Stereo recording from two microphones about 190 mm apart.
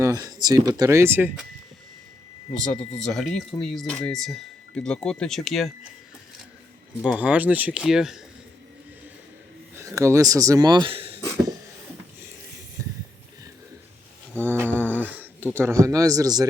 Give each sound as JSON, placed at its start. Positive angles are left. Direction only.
{"t": 0.0, "sound": "speech", "side_deg": -20}
{"t": 3.0, "sound": "speech", "side_deg": 0}
{"t": 7.0, "sound": "speech", "side_deg": -5}
{"t": 9.7, "sound": "speech", "side_deg": -15}
{"t": 12.8, "sound": "a sound", "side_deg": -15}
{"t": 14.4, "sound": "a sound", "side_deg": -10}
{"t": 15.5, "sound": "speech", "side_deg": -15}